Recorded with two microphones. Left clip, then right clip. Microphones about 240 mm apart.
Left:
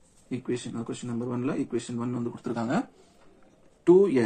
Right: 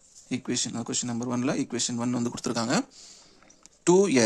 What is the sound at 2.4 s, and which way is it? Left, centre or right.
Speech, right.